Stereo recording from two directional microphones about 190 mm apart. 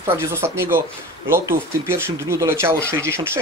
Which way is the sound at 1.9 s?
15° right (ahead or behind).